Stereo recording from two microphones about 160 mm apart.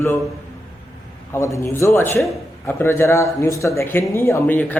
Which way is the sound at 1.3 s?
20° left (ahead or behind).